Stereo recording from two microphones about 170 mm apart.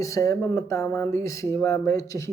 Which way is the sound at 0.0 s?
20° left (ahead or behind).